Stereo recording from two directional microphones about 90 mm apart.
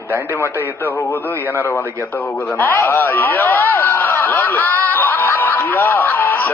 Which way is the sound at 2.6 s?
25° left (ahead or behind).